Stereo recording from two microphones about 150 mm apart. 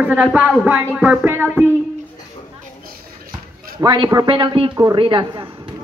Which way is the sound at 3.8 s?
30° right (ahead or behind).